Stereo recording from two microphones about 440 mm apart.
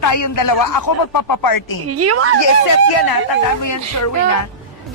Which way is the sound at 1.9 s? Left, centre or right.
Right.